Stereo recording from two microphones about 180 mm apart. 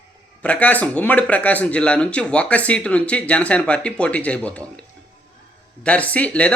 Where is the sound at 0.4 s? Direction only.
10° left (ahead or behind).